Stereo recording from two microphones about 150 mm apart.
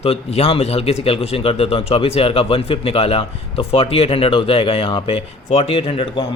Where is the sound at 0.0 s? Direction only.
40° left (ahead or behind).